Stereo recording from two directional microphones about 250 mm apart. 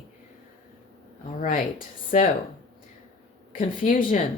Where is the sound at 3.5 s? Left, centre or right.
Left.